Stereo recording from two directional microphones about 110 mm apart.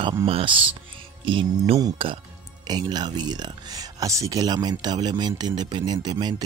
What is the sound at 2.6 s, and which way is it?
Speech, 40° right (ahead or behind).